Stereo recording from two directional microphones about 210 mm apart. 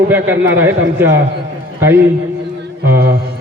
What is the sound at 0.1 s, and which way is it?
A man's voice, 10° right (ahead or behind).